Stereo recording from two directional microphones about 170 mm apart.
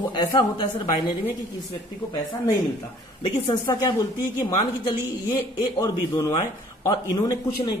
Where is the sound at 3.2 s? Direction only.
25° left (ahead or behind).